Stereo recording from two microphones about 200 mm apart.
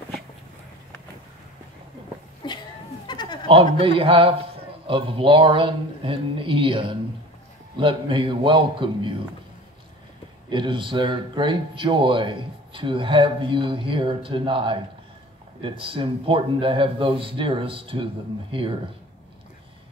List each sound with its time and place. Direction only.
2.4 s a sound: 20° left (ahead or behind)
3.1 s goat: 20° left (ahead or behind)
3.4 s speech: 30° right (ahead or behind)
10.5 s speech: 25° right (ahead or behind)
15.8 s speech: 25° right (ahead or behind)